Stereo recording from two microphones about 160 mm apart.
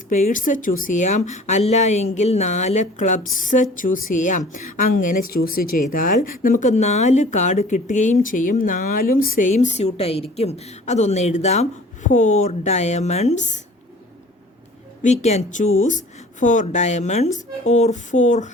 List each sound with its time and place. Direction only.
0.1 s speech: 50° left (ahead or behind)
15.0 s speech: 45° left (ahead or behind)